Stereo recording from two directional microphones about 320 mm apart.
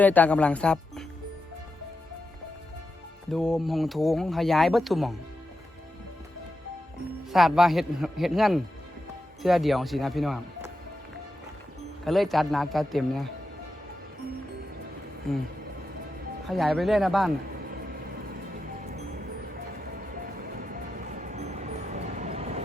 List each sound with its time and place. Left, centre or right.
0.0 s speech: centre
3.3 s speech: centre
7.3 s speech: centre
12.0 s speech: centre
15.3 s speech: centre
16.5 s speech: centre
18.8 s music: right
20.1 s music: right